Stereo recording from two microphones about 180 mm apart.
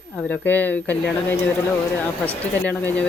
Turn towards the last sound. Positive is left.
turn(degrees=10)  # may be behind; listen again after turning